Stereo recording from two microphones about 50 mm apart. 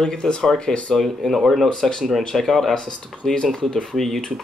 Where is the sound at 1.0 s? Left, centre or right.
Centre.